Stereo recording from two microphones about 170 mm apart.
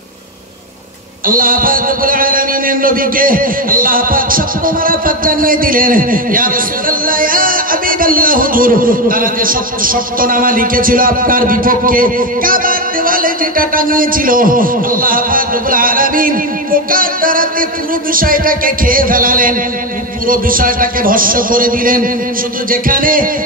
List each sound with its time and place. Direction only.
1.2 s a man's voice: 55° right (ahead or behind)